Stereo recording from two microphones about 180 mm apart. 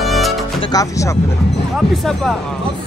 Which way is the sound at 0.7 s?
20° left (ahead or behind).